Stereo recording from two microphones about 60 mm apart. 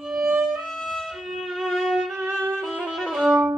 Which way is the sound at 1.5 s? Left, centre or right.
Centre.